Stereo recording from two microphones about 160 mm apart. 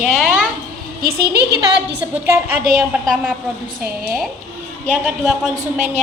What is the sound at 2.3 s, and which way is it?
A woman's voice, 10° right (ahead or behind).